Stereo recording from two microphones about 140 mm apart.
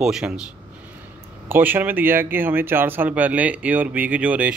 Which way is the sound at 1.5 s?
15° right (ahead or behind).